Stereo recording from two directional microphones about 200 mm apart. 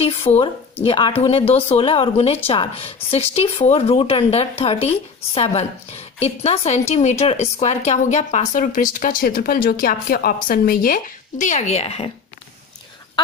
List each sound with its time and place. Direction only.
0.3 s a woman's voice: 35° left (ahead or behind)